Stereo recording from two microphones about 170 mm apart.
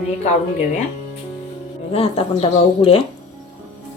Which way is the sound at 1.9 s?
35° left (ahead or behind).